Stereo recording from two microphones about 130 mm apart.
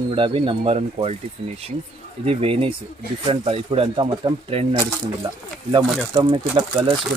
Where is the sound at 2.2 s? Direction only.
45° right (ahead or behind).